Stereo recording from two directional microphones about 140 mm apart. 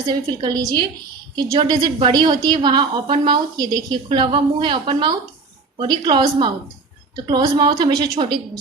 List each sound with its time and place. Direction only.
0.0 s a woman's voice: 30° right (ahead or behind)